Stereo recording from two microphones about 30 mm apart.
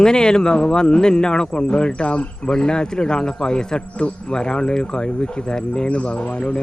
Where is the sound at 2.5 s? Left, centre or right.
Left.